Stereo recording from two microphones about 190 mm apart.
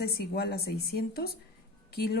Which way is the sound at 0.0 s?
55° left (ahead or behind).